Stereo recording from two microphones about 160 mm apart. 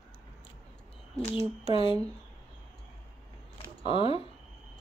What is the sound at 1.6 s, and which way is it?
Speech, 35° left (ahead or behind).